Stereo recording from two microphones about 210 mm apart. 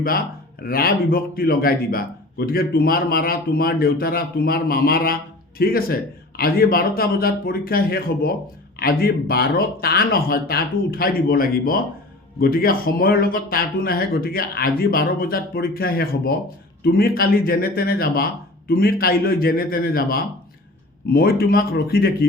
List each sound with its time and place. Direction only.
0.6 s a man's voice: 45° left (ahead or behind)